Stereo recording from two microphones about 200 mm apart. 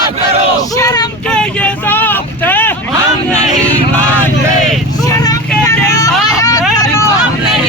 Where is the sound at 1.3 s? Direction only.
5° left (ahead or behind).